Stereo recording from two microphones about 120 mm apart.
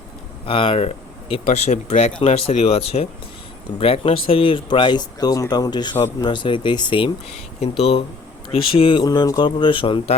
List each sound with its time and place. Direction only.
0.4 s speech: 50° left (ahead or behind); by 2.1 s 70° left (ahead or behind)
2.2 s speech: 60° left (ahead or behind); by 7.1 s 40° left (ahead or behind)
7.6 s speech: 55° left (ahead or behind)
9.0 s a man's voice: 30° left (ahead or behind)